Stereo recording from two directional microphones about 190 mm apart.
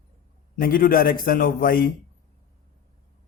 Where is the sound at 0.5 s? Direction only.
50° left (ahead or behind).